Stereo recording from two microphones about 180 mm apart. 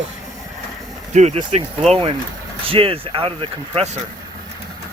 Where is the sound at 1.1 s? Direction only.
40° right (ahead or behind).